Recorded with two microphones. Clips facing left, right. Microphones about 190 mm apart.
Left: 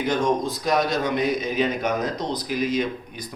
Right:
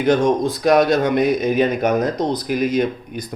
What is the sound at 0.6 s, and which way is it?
Speech, 65° right (ahead or behind).